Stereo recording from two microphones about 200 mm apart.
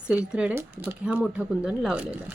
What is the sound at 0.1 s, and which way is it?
Speech, 5° right (ahead or behind).